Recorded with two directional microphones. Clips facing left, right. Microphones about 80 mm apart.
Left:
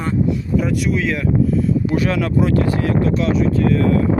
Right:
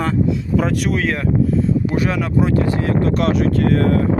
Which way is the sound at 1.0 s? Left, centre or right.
Right.